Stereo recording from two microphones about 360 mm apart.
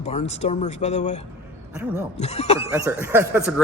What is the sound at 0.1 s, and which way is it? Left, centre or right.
Speech, centre.